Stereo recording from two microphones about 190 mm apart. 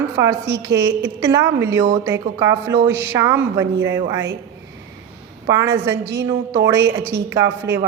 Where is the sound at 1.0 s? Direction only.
15° right (ahead or behind).